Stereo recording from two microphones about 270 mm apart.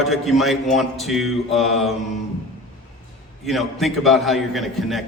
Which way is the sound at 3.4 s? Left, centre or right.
Centre.